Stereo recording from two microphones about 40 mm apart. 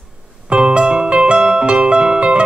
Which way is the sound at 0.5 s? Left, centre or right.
Right.